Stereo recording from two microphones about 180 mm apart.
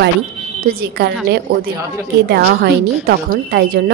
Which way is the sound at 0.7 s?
60° right (ahead or behind).